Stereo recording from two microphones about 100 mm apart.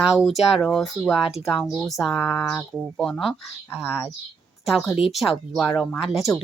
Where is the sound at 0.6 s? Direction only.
10° left (ahead or behind).